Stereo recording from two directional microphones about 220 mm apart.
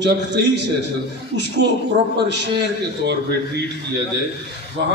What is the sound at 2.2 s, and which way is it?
Speech, 50° right (ahead or behind).